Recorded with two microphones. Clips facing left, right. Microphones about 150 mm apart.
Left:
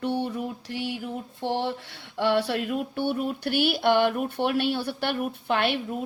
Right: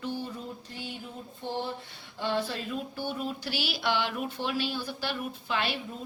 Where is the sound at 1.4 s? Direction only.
75° left (ahead or behind); by 5.7 s 55° left (ahead or behind).